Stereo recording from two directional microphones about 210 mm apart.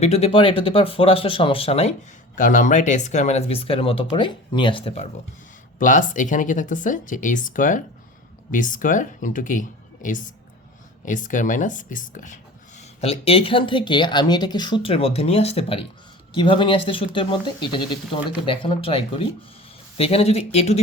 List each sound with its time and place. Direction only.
0.0 s speech: 30° left (ahead or behind)
5.8 s speech: 40° left (ahead or behind)